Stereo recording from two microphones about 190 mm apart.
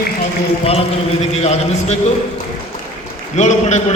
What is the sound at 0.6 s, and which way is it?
A man's voice, 30° left (ahead or behind).